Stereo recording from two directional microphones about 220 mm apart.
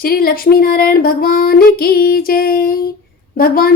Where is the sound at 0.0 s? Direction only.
40° left (ahead or behind).